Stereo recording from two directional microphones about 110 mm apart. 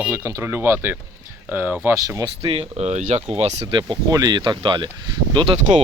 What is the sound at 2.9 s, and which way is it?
Speech, 90° right.